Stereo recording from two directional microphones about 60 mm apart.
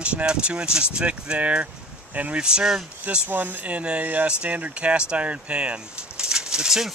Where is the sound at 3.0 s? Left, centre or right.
Right; by 6.9 s centre.